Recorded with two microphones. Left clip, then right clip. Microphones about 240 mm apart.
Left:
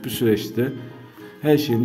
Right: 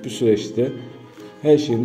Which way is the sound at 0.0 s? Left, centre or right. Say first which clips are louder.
Right 2 dB; left.